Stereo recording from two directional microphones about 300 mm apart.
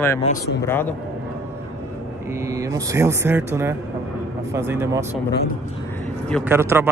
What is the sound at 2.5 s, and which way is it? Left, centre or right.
Speech, centre.